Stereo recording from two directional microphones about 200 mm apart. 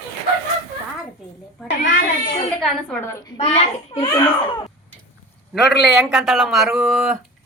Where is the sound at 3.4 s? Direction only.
30° left (ahead or behind).